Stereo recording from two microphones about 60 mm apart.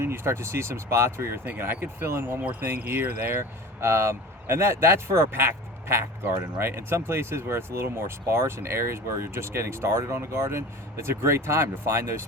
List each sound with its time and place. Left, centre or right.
0.0 s speech: right
2.4 s speech: right